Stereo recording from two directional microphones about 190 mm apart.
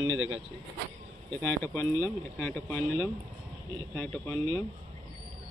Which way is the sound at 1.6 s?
15° left (ahead or behind).